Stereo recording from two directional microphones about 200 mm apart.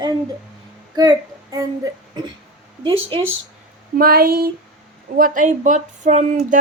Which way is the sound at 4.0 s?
50° right (ahead or behind).